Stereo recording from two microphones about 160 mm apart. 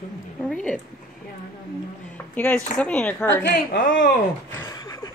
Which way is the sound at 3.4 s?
90° left.